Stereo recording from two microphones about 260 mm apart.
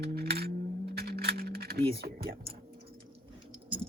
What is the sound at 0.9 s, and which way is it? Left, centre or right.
Typing, right.